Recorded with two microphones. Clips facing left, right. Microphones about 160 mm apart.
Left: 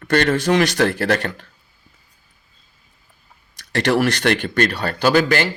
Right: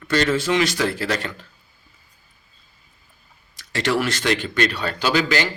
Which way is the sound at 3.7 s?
60° left (ahead or behind).